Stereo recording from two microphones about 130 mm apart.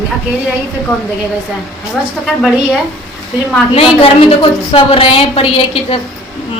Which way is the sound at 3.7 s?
45° left (ahead or behind).